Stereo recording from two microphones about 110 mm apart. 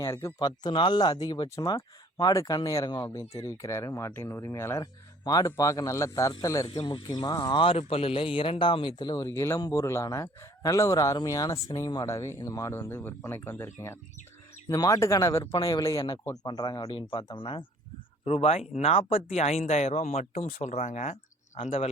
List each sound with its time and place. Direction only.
0.0 s speech: 25° left (ahead or behind)
0.3 s speech: 40° left (ahead or behind); by 4.8 s 25° left (ahead or behind)
4.8 s speech: 35° left (ahead or behind)
6.8 s a man's voice: 45° left (ahead or behind); by 15.4 s 30° left (ahead or behind)
15.5 s a man's voice: 45° left (ahead or behind)
16.8 s a man's voice: 50° left (ahead or behind)
18.3 s speech: 80° left
18.7 s speech: 65° left (ahead or behind)